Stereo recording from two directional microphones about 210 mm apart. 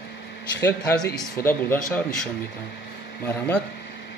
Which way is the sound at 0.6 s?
15° left (ahead or behind).